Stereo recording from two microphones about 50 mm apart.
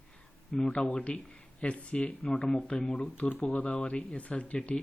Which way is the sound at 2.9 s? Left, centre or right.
Left.